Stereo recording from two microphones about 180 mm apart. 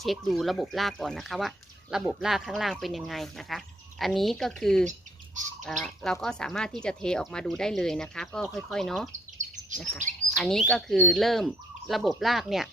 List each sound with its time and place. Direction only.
0.0 s speech: centre (ahead or behind)
4.9 s squawk: 45° right (ahead or behind)
5.6 s speech: centre (ahead or behind)